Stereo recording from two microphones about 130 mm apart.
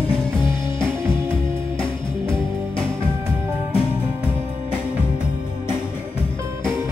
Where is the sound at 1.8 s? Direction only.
40° left (ahead or behind).